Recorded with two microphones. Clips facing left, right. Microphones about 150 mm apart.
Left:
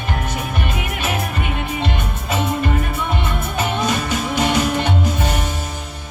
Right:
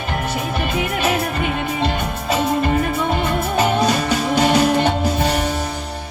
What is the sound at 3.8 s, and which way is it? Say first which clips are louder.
Music: right 3 dB; 35° right (ahead or behind).